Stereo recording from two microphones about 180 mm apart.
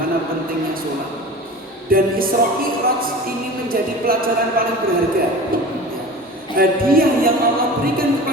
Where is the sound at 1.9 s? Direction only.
55° right (ahead or behind).